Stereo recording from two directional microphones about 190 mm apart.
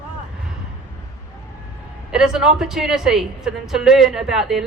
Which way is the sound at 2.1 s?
5° right (ahead or behind).